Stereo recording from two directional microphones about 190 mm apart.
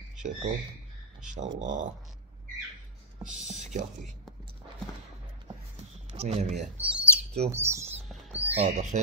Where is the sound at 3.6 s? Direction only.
40° right (ahead or behind).